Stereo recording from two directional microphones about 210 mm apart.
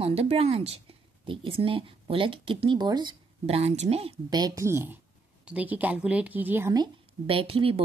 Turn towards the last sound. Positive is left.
turn(degrees=-25)  # may be behind; listen again after turning